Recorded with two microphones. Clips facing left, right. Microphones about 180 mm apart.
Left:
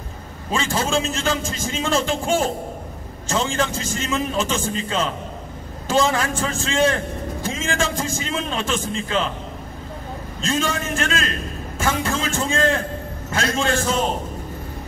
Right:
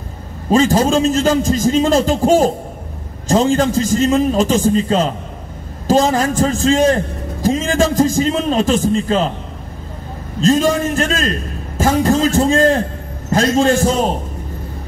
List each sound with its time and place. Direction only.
0.5 s a man's voice: 40° right (ahead or behind)
10.4 s a man's voice: 40° right (ahead or behind)